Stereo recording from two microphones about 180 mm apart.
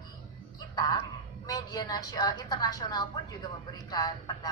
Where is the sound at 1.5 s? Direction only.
20° left (ahead or behind).